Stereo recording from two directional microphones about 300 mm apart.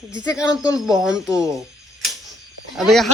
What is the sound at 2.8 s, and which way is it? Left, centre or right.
Speech, centre.